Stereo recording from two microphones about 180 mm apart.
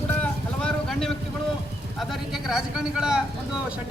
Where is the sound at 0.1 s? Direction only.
5° left (ahead or behind).